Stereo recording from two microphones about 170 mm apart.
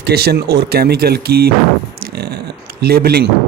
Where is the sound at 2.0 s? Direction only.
70° right (ahead or behind).